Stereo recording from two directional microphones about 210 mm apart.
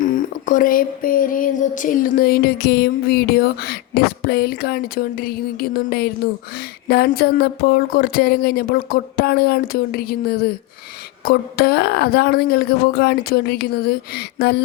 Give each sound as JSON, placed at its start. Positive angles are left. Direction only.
{"t": 0.0, "sound": "speech", "side_deg": 40}